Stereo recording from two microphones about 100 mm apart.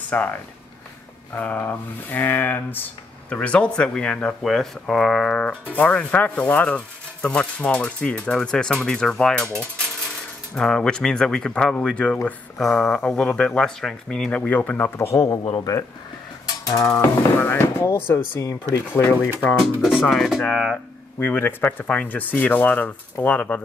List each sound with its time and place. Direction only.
0.1 s speech: 15° left (ahead or behind)
1.3 s speech: 20° left (ahead or behind)
10.5 s speech: 10° left (ahead or behind)
15.0 s speech: 35° left (ahead or behind)
16.4 s mechanisms: 35° left (ahead or behind)
17.0 s speech: 25° left (ahead or behind)
18.4 s speech: 35° left (ahead or behind)
18.9 s speech: 20° left (ahead or behind)
19.8 s speech: centre (ahead or behind)
21.2 s speech: 20° left (ahead or behind)